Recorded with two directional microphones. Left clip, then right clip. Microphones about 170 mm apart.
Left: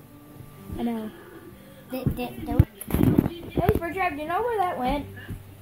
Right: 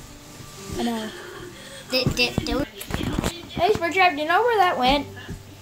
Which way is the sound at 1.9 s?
45° left (ahead or behind).